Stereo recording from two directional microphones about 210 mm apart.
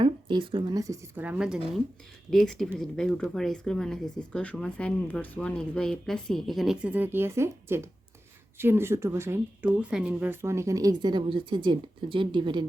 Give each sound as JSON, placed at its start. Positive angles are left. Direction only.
{"t": 0.0, "sound": "speech", "side_deg": -20}